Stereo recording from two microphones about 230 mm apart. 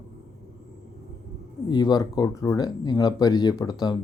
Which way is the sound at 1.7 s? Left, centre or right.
Centre.